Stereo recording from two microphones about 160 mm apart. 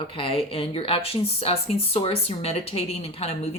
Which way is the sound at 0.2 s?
35° left (ahead or behind).